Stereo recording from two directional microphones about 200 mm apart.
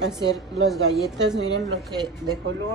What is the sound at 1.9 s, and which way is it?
Speech, 20° right (ahead or behind).